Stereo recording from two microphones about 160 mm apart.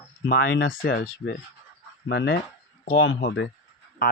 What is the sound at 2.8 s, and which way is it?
Speech, 70° left (ahead or behind).